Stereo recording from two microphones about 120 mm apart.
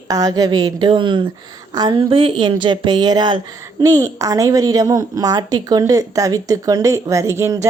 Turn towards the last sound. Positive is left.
turn(degrees=-25)  # may be behind; listen again after turning